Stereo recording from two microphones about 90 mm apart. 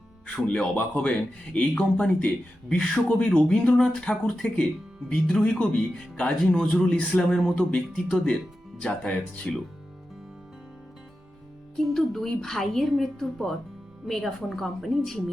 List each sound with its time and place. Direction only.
0.3 s speech: 10° left (ahead or behind)
6.9 s speech: 15° left (ahead or behind)
7.2 s a woman's voice: 5° left (ahead or behind)
11.8 s a woman's voice: 5° left (ahead or behind)